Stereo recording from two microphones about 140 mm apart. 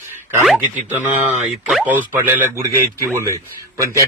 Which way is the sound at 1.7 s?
10° right (ahead or behind).